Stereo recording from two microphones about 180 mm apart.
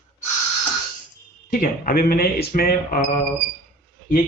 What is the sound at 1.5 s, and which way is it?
Speech, 50° left (ahead or behind).